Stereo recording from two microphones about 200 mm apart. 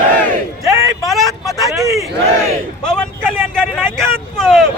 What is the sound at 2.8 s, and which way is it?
Speech, 5° left (ahead or behind).